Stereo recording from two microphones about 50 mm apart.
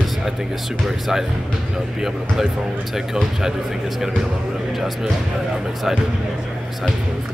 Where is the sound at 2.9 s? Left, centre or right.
Centre.